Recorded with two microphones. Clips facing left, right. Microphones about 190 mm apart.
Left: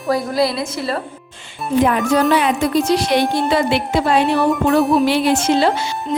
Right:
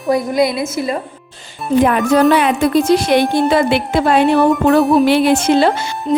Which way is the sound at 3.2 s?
Centre (ahead or behind).